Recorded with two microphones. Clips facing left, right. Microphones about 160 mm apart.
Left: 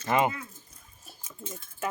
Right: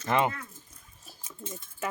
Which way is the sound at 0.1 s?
10° left (ahead or behind).